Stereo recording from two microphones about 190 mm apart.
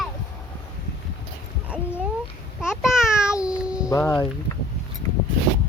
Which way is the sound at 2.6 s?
Centre (ahead or behind).